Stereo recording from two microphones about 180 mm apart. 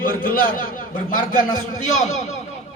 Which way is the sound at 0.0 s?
50° left (ahead or behind).